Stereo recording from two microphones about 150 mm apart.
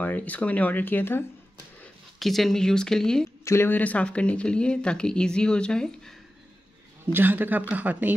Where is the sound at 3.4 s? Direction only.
15° left (ahead or behind).